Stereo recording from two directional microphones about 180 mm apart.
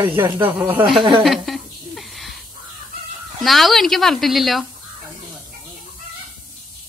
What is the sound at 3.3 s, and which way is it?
Speech, centre (ahead or behind).